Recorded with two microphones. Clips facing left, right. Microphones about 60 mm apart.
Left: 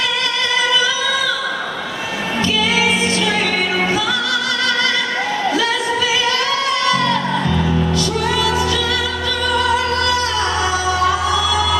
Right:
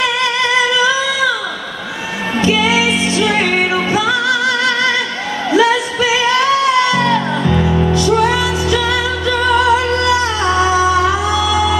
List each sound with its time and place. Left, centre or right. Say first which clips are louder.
2.4 s music: right 4 dB; right
6.2 s music: right 6 dB; centre
9.6 s music: right 4 dB; right